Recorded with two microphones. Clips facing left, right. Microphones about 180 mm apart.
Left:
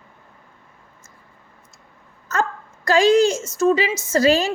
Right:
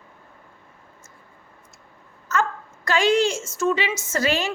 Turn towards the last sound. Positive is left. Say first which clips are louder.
# left 7 dB
turn(degrees=35)  # may be behind; listen again after turning